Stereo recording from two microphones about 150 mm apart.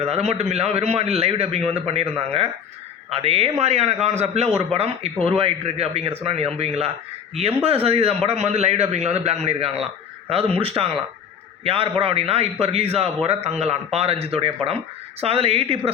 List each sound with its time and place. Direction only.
0.0 s a man's voice: 45° right (ahead or behind)